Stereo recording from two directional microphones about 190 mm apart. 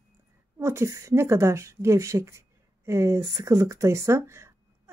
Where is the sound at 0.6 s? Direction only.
15° right (ahead or behind).